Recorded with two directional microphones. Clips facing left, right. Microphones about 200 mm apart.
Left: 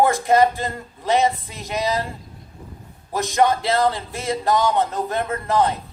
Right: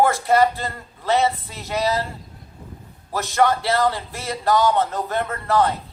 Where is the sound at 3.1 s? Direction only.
15° left (ahead or behind).